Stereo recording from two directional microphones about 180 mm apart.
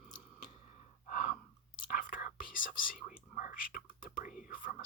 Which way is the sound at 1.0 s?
50° left (ahead or behind).